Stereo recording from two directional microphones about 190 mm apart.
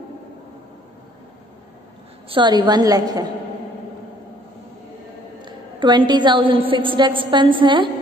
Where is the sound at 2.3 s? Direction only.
25° right (ahead or behind).